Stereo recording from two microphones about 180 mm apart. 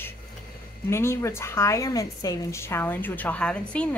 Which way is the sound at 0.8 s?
15° left (ahead or behind).